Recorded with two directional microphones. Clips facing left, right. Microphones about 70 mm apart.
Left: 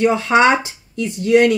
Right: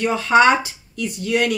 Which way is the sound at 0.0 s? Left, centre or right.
Left.